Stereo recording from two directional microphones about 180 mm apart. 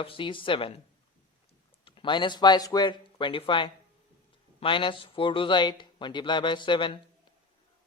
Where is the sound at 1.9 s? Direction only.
25° left (ahead or behind).